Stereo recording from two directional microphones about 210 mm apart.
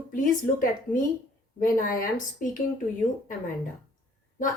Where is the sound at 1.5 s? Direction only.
40° left (ahead or behind).